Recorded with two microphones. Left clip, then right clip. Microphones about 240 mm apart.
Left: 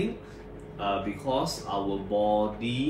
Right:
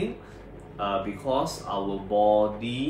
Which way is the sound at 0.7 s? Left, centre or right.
Centre.